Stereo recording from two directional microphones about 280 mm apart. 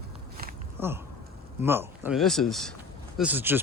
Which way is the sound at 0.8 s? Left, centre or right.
Centre.